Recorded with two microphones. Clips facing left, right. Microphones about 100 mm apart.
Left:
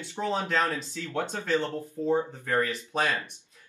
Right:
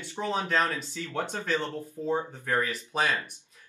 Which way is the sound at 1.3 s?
20° left (ahead or behind).